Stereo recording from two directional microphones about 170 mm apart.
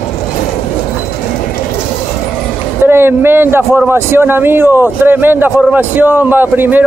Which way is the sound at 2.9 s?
15° right (ahead or behind).